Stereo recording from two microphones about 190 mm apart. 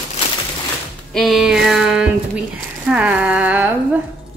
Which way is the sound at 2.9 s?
5° right (ahead or behind).